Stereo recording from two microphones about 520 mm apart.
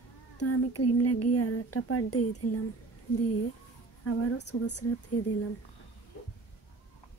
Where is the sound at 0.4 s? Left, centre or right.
Left.